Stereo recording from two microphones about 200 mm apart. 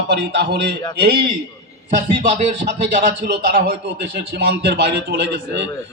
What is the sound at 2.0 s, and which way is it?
A man's voice, 40° right (ahead or behind).